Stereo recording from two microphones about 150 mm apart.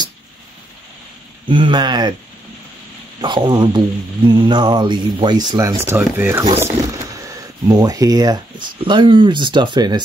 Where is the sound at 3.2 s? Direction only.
30° right (ahead or behind).